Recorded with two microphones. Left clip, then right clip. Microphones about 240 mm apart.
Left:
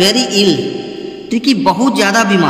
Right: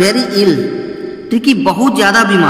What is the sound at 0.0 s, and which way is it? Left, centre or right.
Speech, centre.